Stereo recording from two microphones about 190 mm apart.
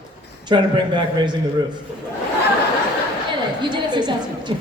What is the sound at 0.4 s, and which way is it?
Speech, 25° right (ahead or behind).